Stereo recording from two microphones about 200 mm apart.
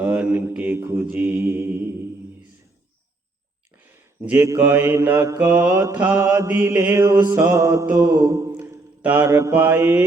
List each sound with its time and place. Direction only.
0.0 s mantra: 5° right (ahead or behind)
3.9 s mantra: 10° right (ahead or behind)